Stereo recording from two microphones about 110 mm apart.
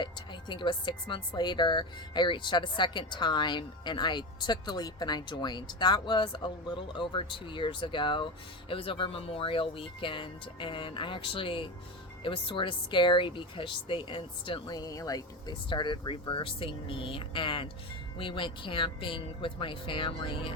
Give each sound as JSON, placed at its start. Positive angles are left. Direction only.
{"t": 0.0, "sound": "speech", "side_deg": 45}
{"t": 14.8, "sound": "speech", "side_deg": 35}